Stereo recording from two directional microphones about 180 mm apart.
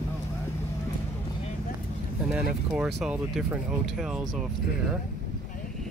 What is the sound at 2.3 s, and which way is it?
Speech, 5° right (ahead or behind).